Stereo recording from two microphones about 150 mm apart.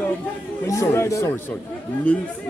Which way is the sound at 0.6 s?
20° left (ahead or behind).